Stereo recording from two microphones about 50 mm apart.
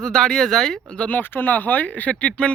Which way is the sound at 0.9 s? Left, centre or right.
Left.